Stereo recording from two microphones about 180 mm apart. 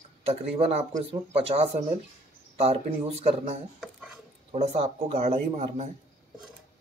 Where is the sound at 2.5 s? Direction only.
35° right (ahead or behind).